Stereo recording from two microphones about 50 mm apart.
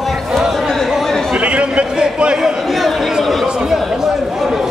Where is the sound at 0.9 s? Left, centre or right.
Centre.